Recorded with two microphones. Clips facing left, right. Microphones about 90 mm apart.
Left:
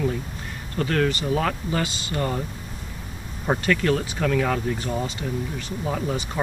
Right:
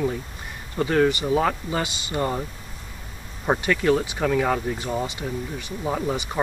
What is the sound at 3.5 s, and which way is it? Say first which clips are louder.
Speech: right 1 dB; 10° right (ahead or behind).